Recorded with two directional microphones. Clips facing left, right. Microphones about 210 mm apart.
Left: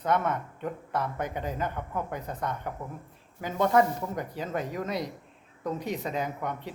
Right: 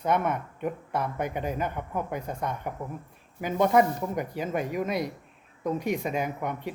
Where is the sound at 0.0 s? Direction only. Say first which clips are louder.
Right 1 dB; 10° right (ahead or behind).